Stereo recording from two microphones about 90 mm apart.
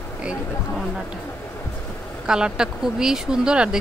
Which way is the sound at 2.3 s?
10° right (ahead or behind).